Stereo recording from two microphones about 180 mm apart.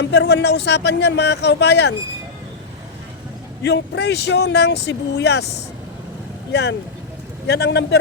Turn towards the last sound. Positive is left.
turn(degrees=65)  # may be behind; listen again after turning